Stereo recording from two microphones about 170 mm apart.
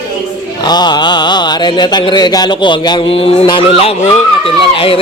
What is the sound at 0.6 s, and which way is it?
Speech, 25° left (ahead or behind).